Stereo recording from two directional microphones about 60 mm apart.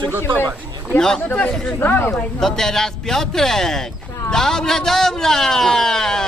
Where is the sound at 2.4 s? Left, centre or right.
Centre.